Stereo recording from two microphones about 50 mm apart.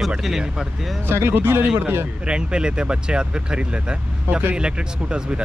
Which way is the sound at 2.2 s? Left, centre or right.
Centre.